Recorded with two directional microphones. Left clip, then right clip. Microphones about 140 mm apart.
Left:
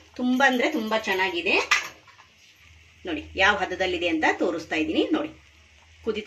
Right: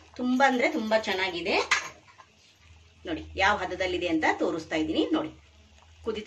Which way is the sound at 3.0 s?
65° left (ahead or behind).